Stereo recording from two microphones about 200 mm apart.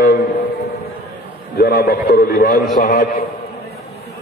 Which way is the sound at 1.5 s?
50° left (ahead or behind).